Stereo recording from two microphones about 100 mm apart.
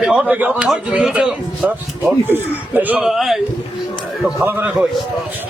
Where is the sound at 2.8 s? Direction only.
15° right (ahead or behind).